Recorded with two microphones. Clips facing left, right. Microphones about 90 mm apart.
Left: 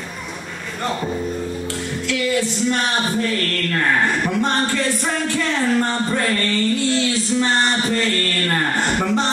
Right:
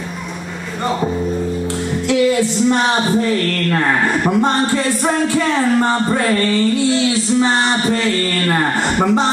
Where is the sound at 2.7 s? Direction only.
20° right (ahead or behind).